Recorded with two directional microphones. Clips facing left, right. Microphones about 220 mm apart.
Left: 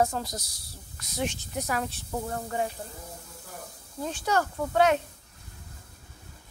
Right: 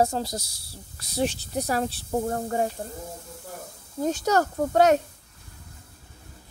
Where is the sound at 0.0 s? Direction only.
30° right (ahead or behind).